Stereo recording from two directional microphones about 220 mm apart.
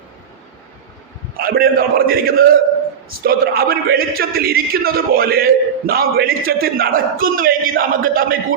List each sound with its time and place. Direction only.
1.4 s a man's voice: 40° right (ahead or behind)